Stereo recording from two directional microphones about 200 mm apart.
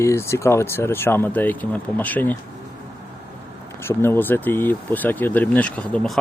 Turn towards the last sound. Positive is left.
turn(degrees=5)  # may be behind; listen again after turning